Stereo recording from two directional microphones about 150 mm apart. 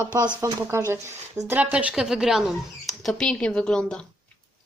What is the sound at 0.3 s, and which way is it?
A woman's voice, 15° right (ahead or behind).